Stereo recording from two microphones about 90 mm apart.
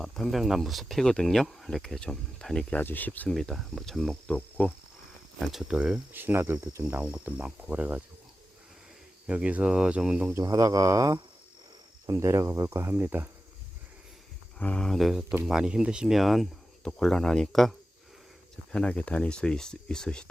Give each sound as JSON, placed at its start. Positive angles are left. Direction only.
{"t": 0.0, "sound": "speech", "side_deg": 0}
{"t": 2.7, "sound": "speech", "side_deg": 20}
{"t": 3.2, "sound": "speech", "side_deg": 5}
{"t": 4.3, "sound": "cricket", "side_deg": 15}
{"t": 5.4, "sound": "speech", "side_deg": 0}
{"t": 6.1, "sound": "cricket", "side_deg": -25}
{"t": 7.0, "sound": "speech", "side_deg": -15}
{"t": 9.2, "sound": "speech", "side_deg": -10}
{"t": 10.4, "sound": "speech", "side_deg": -40}
{"t": 12.0, "sound": "cricket", "side_deg": -30}
{"t": 14.6, "sound": "speech", "side_deg": 15}
{"t": 14.8, "sound": "speech", "side_deg": 0}
{"t": 18.7, "sound": "speech", "side_deg": 10}